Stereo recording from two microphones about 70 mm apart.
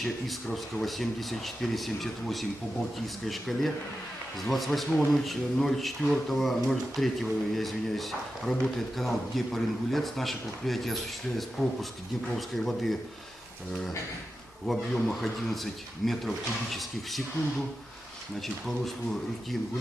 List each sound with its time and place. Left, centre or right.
0.0 s speech: centre
14.7 s speech: centre
18.3 s speech: centre